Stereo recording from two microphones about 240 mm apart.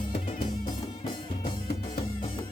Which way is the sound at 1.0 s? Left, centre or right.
Centre.